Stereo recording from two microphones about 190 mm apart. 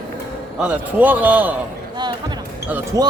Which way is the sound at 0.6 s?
10° right (ahead or behind).